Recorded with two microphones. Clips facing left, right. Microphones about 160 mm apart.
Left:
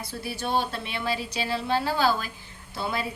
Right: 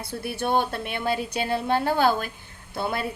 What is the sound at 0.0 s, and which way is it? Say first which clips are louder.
A woman's voice: right 4 dB; 60° right (ahead or behind).